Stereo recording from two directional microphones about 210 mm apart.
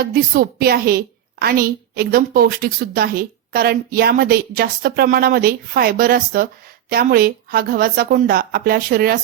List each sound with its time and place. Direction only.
0.0 s a woman's voice: 45° right (ahead or behind)